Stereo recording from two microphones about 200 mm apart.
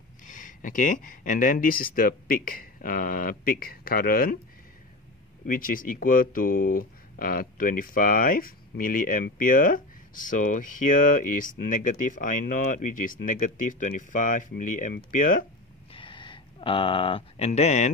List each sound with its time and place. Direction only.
0.2 s speech: 40° left (ahead or behind)
5.4 s speech: 45° left (ahead or behind)
15.9 s a sound: 25° left (ahead or behind)